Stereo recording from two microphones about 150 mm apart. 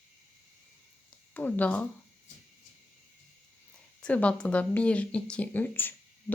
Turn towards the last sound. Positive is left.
turn(degrees=15)  # may be behind; listen again after turning